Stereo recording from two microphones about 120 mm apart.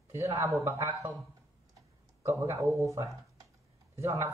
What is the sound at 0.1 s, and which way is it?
Speech, 25° right (ahead or behind).